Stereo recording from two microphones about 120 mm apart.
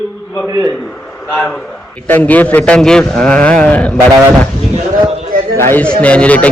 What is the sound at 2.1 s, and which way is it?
A man's voice, 15° left (ahead or behind).